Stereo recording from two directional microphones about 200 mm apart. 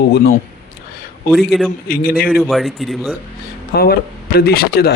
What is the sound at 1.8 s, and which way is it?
Speech, 45° left (ahead or behind).